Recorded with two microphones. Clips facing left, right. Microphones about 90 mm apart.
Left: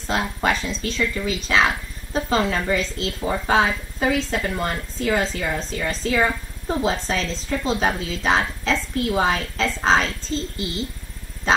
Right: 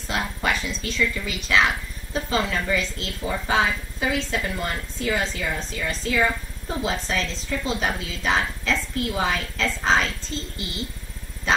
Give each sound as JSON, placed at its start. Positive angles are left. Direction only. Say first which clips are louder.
{"t": 0.0, "sound": "speech", "louder": "left 4 dB", "side_deg": 35}